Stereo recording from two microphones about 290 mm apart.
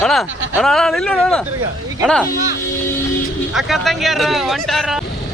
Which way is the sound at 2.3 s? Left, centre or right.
Left.